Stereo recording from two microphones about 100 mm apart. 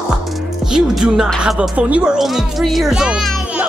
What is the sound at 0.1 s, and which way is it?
Music, 5° right (ahead or behind).